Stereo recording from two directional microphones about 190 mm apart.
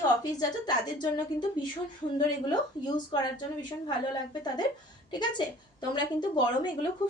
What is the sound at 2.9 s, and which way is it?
Speech, 20° left (ahead or behind).